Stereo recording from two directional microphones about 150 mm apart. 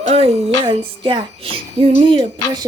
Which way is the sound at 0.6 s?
35° right (ahead or behind).